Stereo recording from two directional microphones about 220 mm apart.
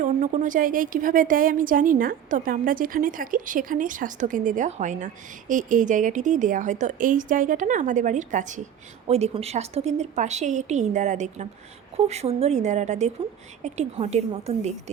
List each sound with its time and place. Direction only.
0.0 s a woman's voice: 35° right (ahead or behind)